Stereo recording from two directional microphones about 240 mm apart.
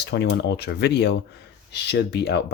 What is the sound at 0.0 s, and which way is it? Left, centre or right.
Speech, left.